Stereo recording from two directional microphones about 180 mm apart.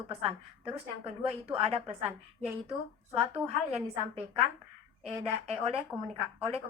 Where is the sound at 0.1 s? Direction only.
35° right (ahead or behind).